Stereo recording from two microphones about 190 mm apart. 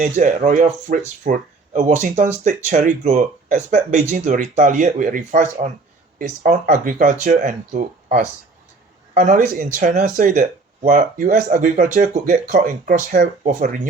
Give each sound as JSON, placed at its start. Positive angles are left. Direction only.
{"t": 0.0, "sound": "speech", "side_deg": -45}